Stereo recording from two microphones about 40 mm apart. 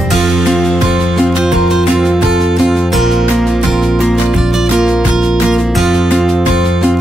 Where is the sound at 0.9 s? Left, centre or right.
Centre.